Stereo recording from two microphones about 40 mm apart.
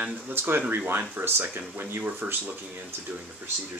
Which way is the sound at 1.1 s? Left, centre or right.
Right.